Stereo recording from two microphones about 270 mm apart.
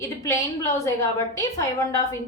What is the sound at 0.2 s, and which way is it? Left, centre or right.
A woman's voice, centre.